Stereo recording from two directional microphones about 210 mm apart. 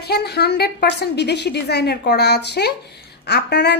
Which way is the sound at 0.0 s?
50° left (ahead or behind).